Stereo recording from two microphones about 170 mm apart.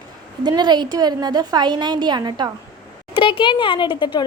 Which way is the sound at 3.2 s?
30° left (ahead or behind).